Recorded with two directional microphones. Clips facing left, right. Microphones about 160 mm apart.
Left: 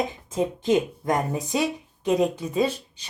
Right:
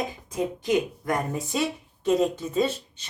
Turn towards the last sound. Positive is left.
turn(degrees=15)  # may be behind; listen again after turning